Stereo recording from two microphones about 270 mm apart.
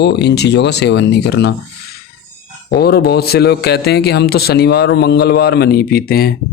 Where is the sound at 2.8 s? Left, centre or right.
Left.